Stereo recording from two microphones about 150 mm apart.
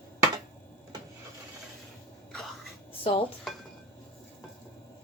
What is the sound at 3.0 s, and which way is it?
Dishes, 35° left (ahead or behind).